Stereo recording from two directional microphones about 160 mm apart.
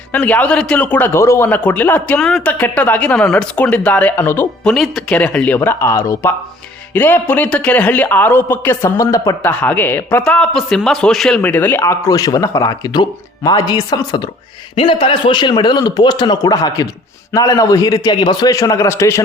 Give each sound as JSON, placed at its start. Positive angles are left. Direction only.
{"t": 0.1, "sound": "a man's voice", "side_deg": 10}
{"t": 4.7, "sound": "a man's voice", "side_deg": 0}